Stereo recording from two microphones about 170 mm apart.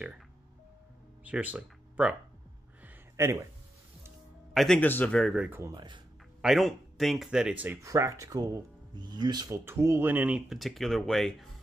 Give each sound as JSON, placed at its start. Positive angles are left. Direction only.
{"t": 1.2, "sound": "a sound", "side_deg": -10}
{"t": 4.6, "sound": "speech", "side_deg": 5}
{"t": 5.6, "sound": "speech", "side_deg": -25}
{"t": 6.4, "sound": "speech", "side_deg": 0}